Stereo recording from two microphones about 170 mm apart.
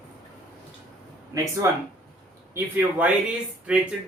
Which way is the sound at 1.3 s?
20° right (ahead or behind).